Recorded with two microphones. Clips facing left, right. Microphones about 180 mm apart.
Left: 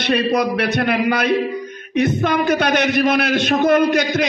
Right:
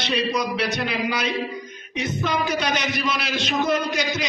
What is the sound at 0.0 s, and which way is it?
A man's voice, 55° left (ahead or behind).